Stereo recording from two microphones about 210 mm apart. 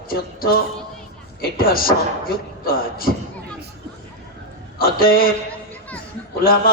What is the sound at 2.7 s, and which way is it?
Speech, 45° left (ahead or behind).